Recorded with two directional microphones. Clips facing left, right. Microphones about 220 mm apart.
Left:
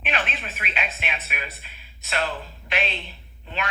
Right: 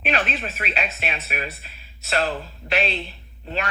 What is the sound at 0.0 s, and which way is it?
Speech, 40° right (ahead or behind).